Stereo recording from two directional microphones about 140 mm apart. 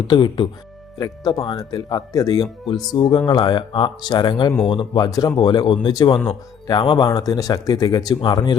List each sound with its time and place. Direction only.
0.1 s speech: 35° left (ahead or behind)